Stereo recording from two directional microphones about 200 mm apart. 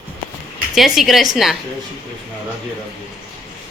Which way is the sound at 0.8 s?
Centre (ahead or behind).